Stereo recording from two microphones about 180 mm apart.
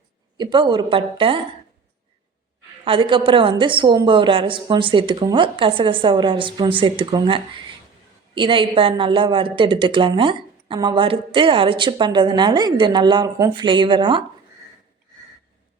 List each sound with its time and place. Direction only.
0.3 s a woman's voice: 25° right (ahead or behind)
2.8 s a woman's voice: 30° right (ahead or behind)